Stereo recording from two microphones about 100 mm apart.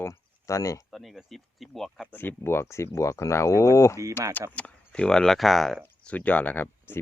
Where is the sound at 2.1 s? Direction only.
20° left (ahead or behind).